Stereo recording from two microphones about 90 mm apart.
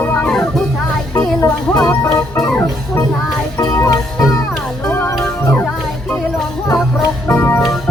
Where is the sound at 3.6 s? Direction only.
35° left (ahead or behind).